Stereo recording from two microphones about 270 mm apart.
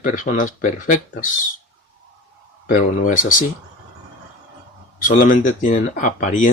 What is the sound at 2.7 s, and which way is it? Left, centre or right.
Speech, left.